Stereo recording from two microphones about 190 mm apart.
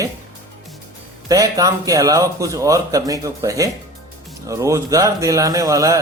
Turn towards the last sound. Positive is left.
turn(degrees=-15)  # may be behind; listen again after turning